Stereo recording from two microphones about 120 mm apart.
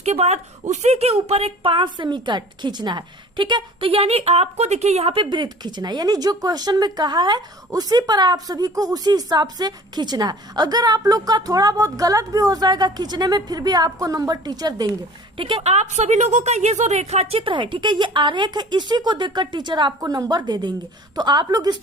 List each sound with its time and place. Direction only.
0.0 s a woman's voice: 65° right (ahead or behind); by 14.8 s 35° right (ahead or behind)
15.4 s a woman's voice: 45° right (ahead or behind)
15.6 s a woman's voice: 65° right (ahead or behind)
17.4 s a woman's voice: 45° right (ahead or behind)